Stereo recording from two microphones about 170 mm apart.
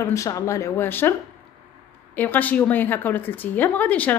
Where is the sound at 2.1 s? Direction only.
10° left (ahead or behind).